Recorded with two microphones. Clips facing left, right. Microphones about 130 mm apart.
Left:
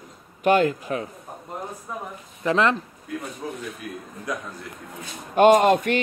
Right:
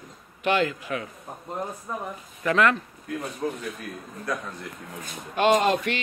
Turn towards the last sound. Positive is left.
turn(degrees=50)  # may be behind; listen again after turning